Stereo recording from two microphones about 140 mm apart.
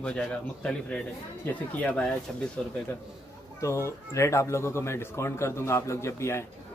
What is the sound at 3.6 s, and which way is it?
A man's voice, 20° left (ahead or behind).